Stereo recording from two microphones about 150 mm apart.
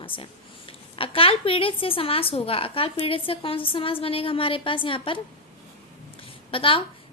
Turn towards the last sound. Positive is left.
turn(degrees=35)  # may be behind; listen again after turning